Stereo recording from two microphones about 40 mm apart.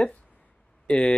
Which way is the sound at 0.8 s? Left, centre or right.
Left.